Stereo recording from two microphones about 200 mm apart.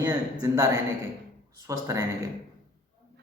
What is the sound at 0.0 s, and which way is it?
A man's voice, 20° right (ahead or behind).